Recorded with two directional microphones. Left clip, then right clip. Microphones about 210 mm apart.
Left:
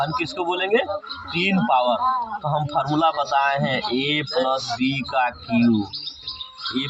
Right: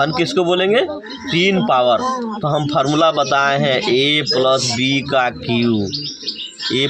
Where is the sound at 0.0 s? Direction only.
45° right (ahead or behind).